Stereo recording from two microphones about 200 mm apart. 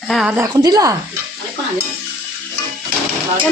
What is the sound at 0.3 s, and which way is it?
Speech, 20° right (ahead or behind).